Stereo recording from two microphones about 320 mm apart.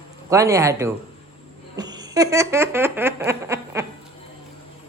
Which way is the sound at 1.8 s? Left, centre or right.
Centre.